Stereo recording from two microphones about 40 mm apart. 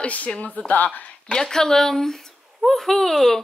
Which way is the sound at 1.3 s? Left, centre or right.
Centre.